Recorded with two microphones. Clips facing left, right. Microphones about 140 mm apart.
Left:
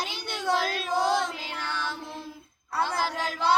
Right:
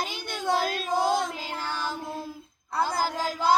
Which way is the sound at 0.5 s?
45° right (ahead or behind).